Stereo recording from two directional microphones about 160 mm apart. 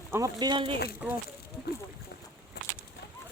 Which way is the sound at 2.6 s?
90° left.